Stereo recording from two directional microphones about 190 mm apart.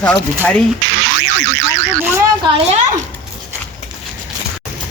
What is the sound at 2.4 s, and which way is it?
Speech, 30° right (ahead or behind).